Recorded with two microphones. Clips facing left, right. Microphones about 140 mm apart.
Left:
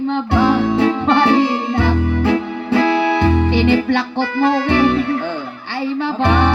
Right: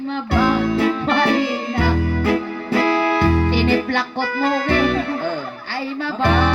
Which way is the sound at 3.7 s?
40° right (ahead or behind).